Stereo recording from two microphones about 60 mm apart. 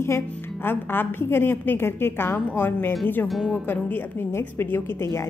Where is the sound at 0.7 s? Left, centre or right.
Left.